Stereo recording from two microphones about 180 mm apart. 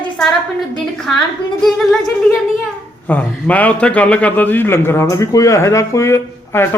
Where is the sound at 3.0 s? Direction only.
10° left (ahead or behind).